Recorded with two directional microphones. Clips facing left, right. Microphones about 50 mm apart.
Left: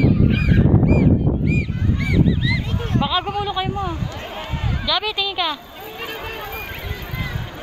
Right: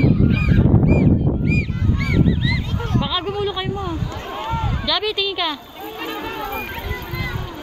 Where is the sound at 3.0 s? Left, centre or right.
Centre.